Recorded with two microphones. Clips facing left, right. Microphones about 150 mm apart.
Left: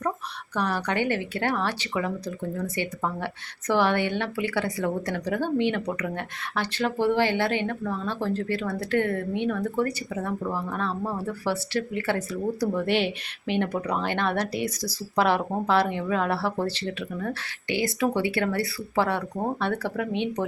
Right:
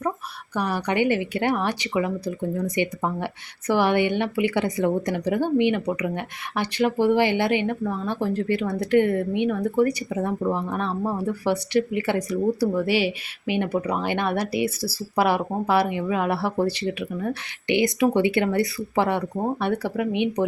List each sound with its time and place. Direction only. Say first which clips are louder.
0.5 s speech: right 2 dB; 15° right (ahead or behind)
12.7 s speech: right 2 dB; 5° right (ahead or behind)